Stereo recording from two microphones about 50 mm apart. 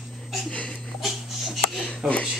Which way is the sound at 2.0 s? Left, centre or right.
Centre.